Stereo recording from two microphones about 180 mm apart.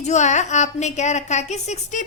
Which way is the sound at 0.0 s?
40° left (ahead or behind).